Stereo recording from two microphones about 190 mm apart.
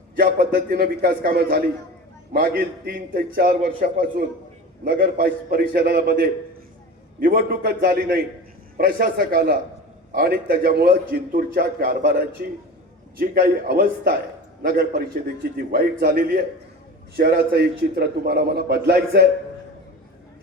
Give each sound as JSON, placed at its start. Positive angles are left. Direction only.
{"t": 0.2, "sound": "a man's voice", "side_deg": -50}